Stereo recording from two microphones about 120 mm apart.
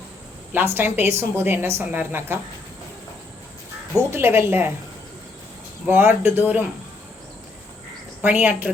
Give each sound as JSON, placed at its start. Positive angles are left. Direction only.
{"t": 0.5, "sound": "a woman's voice", "side_deg": -15}
{"t": 4.1, "sound": "a woman's voice", "side_deg": -20}
{"t": 5.8, "sound": "speech", "side_deg": -20}
{"t": 8.2, "sound": "speech", "side_deg": -15}